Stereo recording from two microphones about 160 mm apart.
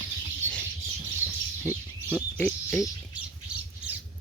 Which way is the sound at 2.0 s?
10° left (ahead or behind).